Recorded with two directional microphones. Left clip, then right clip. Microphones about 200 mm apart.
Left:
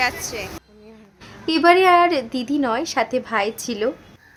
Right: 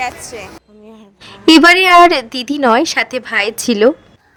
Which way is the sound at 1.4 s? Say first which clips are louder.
Right 7 dB; 50° right (ahead or behind).